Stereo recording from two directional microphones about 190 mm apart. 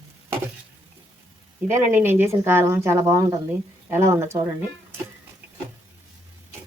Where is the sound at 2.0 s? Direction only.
10° right (ahead or behind).